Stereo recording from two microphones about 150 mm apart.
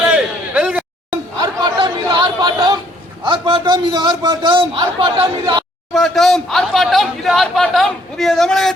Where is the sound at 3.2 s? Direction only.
35° right (ahead or behind).